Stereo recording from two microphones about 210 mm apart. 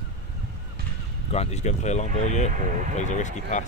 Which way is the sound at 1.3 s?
30° left (ahead or behind).